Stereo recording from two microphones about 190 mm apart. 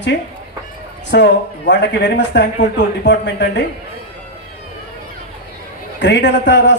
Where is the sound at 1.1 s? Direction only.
70° left (ahead or behind).